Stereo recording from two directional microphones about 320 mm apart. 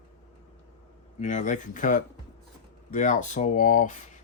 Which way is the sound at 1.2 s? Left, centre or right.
Left.